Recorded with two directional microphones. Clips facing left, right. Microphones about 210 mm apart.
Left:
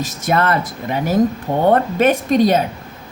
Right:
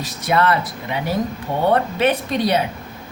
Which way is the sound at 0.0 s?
50° left (ahead or behind).